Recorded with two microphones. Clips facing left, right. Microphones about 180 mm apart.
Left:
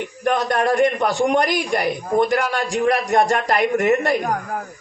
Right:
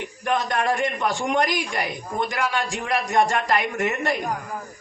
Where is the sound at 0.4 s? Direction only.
35° left (ahead or behind).